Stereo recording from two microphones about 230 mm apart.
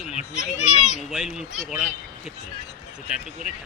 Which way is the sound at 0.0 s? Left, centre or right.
Left.